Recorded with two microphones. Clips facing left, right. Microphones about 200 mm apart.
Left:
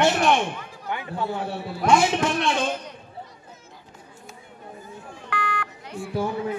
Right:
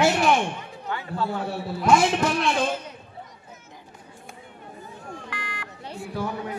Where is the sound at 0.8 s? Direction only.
15° left (ahead or behind).